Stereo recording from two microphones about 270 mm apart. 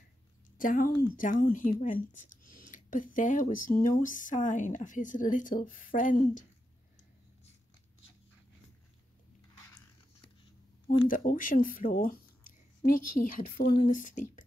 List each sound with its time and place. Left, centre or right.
0.6 s speech: left
11.1 s speech: left